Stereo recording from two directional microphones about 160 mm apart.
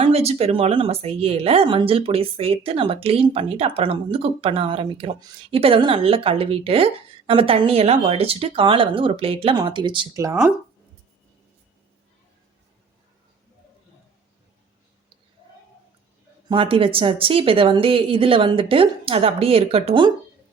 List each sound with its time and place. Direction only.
0.0 s speech: 40° right (ahead or behind)
16.5 s speech: 35° right (ahead or behind)